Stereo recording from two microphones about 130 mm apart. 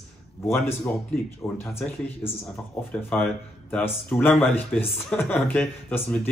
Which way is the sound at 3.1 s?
10° left (ahead or behind).